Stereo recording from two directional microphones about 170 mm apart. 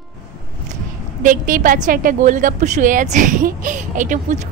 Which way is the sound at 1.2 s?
50° right (ahead or behind).